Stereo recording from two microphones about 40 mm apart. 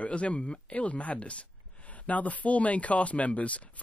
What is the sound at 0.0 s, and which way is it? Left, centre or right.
Speech, left.